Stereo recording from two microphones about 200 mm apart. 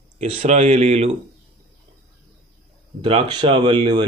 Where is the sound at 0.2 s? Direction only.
30° right (ahead or behind).